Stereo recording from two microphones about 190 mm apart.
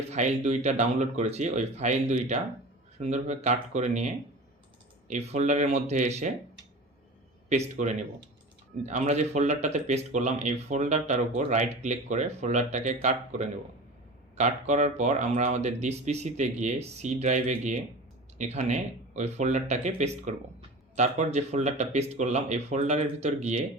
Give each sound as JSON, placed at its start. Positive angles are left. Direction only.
{"t": 0.1, "sound": "speech", "side_deg": -40}
{"t": 7.8, "sound": "speech", "side_deg": -40}